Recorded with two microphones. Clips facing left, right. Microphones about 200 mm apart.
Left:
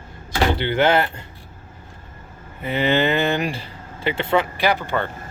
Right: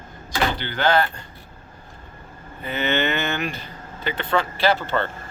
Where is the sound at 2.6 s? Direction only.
30° left (ahead or behind).